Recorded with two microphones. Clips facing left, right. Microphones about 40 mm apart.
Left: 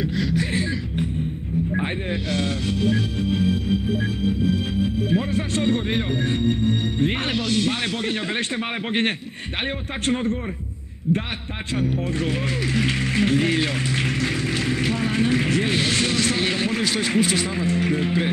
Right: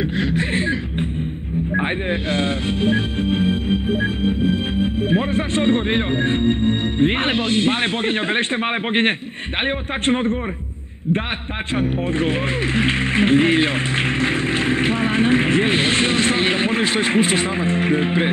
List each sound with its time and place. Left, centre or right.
0.0 s music: right
1.7 s speech: right
11.7 s speech: right